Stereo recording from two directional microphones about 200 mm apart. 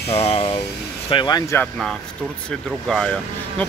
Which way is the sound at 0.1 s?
30° left (ahead or behind).